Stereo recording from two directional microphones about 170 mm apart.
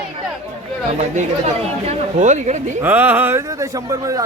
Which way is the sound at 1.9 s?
45° right (ahead or behind).